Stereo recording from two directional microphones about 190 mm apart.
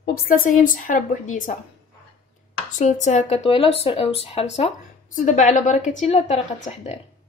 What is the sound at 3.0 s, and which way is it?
A woman's voice, 35° left (ahead or behind).